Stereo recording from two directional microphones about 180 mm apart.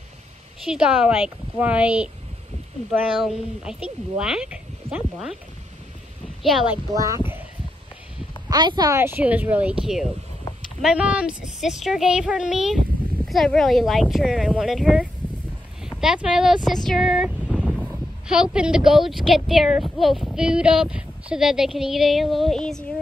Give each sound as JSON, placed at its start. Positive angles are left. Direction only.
{"t": 0.7, "sound": "speech", "side_deg": -5}
{"t": 6.9, "sound": "speech", "side_deg": -20}
{"t": 8.5, "sound": "speech", "side_deg": -25}
{"t": 16.6, "sound": "a sound", "side_deg": 0}
{"t": 18.9, "sound": "speech", "side_deg": 0}